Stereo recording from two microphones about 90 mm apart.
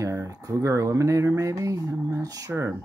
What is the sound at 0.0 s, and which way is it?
Speech, 35° right (ahead or behind).